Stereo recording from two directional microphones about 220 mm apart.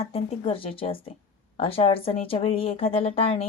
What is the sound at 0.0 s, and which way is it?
Speech, 25° left (ahead or behind).